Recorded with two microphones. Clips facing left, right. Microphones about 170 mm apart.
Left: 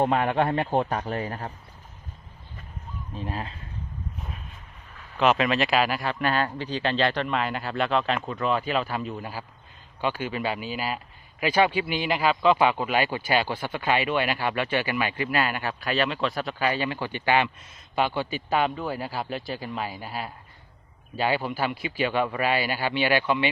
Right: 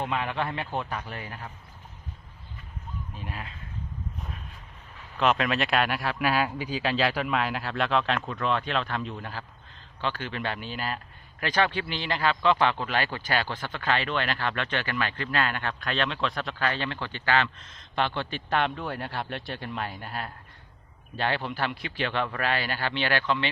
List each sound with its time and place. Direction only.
0.0 s a man's voice: 40° left (ahead or behind)
3.2 s speech: 35° left (ahead or behind)
5.1 s speech: centre (ahead or behind)